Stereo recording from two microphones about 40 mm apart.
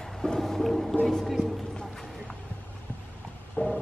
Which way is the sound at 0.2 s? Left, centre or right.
Centre.